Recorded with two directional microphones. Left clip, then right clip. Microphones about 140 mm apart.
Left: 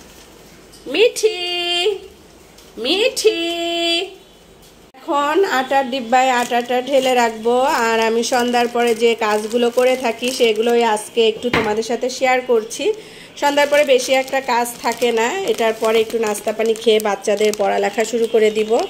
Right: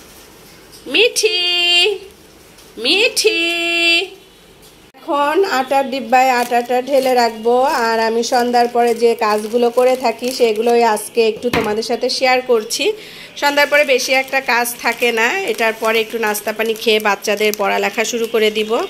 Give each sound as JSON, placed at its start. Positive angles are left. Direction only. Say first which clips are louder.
{"t": 0.9, "sound": "speech", "louder": "right 2 dB", "side_deg": 10}
{"t": 5.0, "sound": "speech", "louder": "right 1 dB", "side_deg": -5}
{"t": 13.4, "sound": "speech", "louder": "right 1 dB", "side_deg": 25}